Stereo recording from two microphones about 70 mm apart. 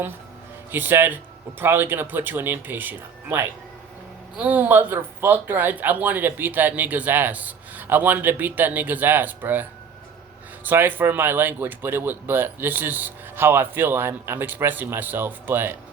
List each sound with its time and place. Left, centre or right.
0.7 s speech: right